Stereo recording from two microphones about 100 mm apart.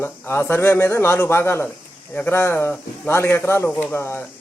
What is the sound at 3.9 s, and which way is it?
Speech, 25° left (ahead or behind).